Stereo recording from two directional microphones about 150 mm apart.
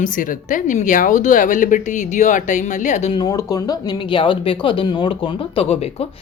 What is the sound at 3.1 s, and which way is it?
Speech, 25° left (ahead or behind).